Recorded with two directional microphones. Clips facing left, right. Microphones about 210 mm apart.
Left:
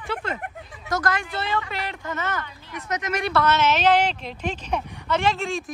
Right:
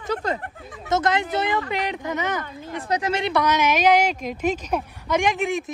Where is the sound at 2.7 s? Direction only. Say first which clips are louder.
Right 4 dB; 30° right (ahead or behind).